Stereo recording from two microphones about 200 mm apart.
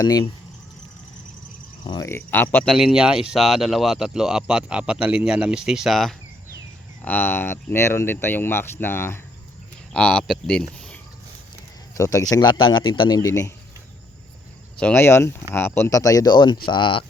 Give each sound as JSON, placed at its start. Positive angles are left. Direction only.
{"t": 0.0, "sound": "a man's voice", "side_deg": 20}
{"t": 1.8, "sound": "speech", "side_deg": 20}
{"t": 2.7, "sound": "speech", "side_deg": -5}
{"t": 11.9, "sound": "a man's voice", "side_deg": 15}
{"t": 14.8, "sound": "a man's voice", "side_deg": 10}